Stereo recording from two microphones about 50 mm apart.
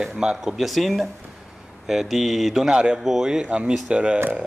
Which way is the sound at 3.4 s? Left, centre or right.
Right.